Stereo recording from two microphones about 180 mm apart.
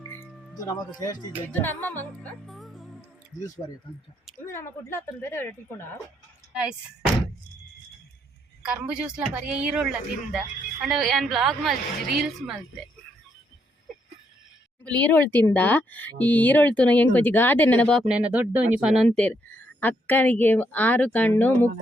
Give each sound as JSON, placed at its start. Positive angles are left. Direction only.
{"t": 0.6, "sound": "speech", "side_deg": 20}
{"t": 2.2, "sound": "music", "side_deg": 0}
{"t": 4.4, "sound": "speech", "side_deg": 15}
{"t": 6.5, "sound": "speech", "side_deg": -5}
{"t": 8.6, "sound": "a woman's voice", "side_deg": -5}
{"t": 14.8, "sound": "speech", "side_deg": 10}
{"t": 18.1, "sound": "speech", "side_deg": -5}